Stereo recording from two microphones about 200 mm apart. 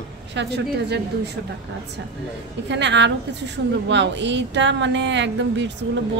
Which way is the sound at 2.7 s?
60° right (ahead or behind).